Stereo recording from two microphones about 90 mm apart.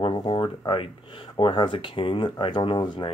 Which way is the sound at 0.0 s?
60° left (ahead or behind).